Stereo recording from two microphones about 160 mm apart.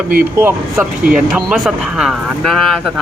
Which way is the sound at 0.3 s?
15° right (ahead or behind).